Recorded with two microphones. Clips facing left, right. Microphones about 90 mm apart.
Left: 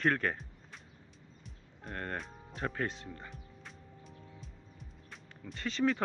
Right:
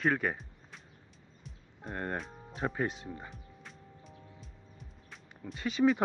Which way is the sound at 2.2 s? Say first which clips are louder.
Right 3 dB; centre (ahead or behind).